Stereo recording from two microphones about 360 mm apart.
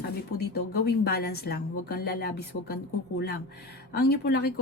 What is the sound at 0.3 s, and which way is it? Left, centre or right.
Speech, left.